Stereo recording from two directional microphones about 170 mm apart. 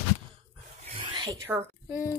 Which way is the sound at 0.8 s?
30° right (ahead or behind).